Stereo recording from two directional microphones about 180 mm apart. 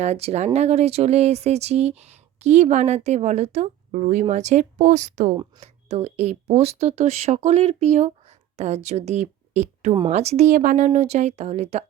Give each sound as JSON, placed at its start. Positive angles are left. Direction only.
{"t": 0.0, "sound": "speech", "side_deg": -35}